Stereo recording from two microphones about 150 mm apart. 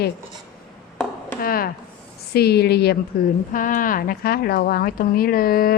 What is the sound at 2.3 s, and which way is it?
Speech, 90° left.